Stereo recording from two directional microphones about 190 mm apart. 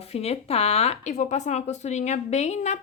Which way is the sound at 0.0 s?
35° left (ahead or behind).